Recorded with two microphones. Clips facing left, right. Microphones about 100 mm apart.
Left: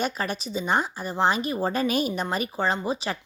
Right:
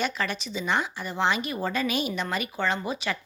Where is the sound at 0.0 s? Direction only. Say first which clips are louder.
Left 1 dB; 40° left (ahead or behind).